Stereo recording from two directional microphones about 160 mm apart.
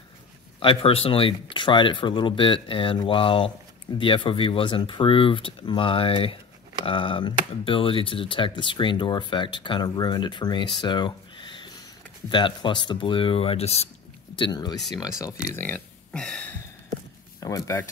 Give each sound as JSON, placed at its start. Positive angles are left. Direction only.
{"t": 0.6, "sound": "speech", "side_deg": 35}
{"t": 14.3, "sound": "speech", "side_deg": 30}
{"t": 15.5, "sound": "speech", "side_deg": 10}
{"t": 17.4, "sound": "speech", "side_deg": 20}